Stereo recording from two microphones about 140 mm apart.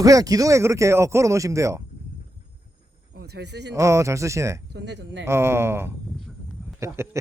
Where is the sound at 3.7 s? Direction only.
20° right (ahead or behind).